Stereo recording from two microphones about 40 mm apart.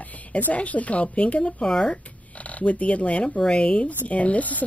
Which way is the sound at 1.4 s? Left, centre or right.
Centre.